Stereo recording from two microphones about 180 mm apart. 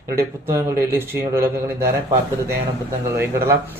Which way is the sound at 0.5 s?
15° right (ahead or behind).